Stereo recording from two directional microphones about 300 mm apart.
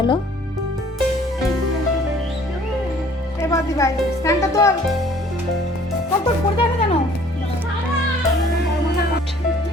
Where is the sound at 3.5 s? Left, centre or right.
Centre.